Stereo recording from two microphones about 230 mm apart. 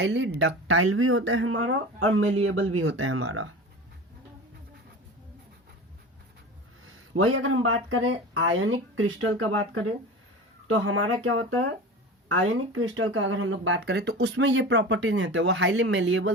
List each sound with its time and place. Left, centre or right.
0.0 s speech: right
6.8 s speech: right